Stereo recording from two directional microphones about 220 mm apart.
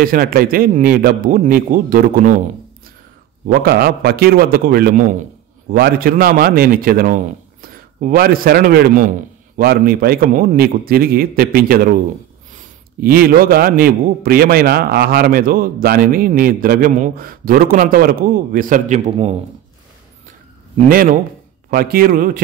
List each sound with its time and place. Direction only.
0.0 s a man's voice: 40° right (ahead or behind)
3.4 s a man's voice: 45° right (ahead or behind); by 19.3 s 30° right (ahead or behind)
20.7 s a man's voice: 40° right (ahead or behind)